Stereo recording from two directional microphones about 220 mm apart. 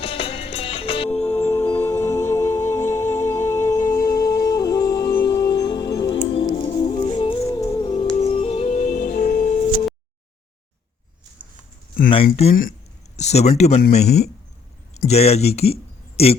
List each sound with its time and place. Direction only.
0.0 s music: 25° left (ahead or behind)
1.4 s music: 10° left (ahead or behind); by 9.6 s 35° left (ahead or behind)
12.1 s speech: 25° left (ahead or behind)